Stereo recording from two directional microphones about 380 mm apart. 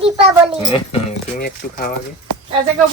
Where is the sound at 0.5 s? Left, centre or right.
Centre.